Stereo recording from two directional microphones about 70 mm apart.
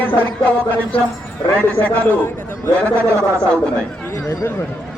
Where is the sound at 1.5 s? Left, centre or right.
Left.